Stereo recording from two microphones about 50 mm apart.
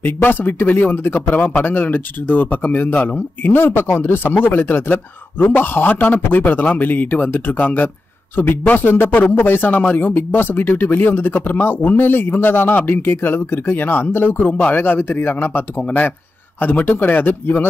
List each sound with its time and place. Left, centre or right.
0.0 s a man's voice: left
16.8 s speech: left